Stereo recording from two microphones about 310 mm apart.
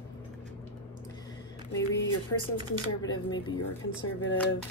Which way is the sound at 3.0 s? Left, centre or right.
Centre.